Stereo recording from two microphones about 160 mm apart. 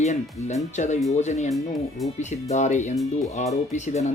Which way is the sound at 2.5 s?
45° left (ahead or behind).